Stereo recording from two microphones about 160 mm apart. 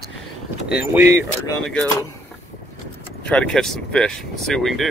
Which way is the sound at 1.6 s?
5° left (ahead or behind).